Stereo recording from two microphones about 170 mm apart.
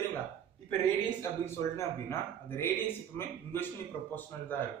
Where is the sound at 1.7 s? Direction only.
15° left (ahead or behind).